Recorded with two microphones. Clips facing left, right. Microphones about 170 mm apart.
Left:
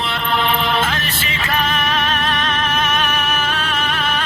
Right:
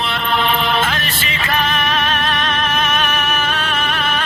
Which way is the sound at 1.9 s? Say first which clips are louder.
Right 1 dB; 65° right (ahead or behind).